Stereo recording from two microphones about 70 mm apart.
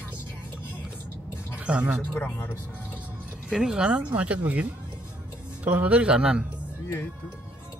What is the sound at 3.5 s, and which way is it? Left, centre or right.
Speech, centre.